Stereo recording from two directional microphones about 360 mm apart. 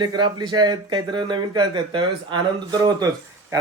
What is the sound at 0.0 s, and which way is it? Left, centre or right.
Speech, centre.